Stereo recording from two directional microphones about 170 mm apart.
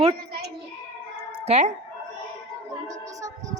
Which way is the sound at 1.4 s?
40° right (ahead or behind).